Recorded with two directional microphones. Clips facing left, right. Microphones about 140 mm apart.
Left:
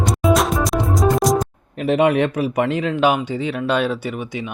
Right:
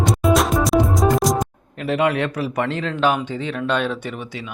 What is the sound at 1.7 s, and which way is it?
Speech, 20° left (ahead or behind).